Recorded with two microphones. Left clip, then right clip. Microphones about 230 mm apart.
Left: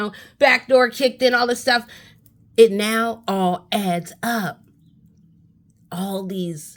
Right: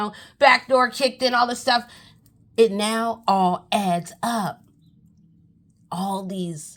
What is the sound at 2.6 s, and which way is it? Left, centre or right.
Speech, centre.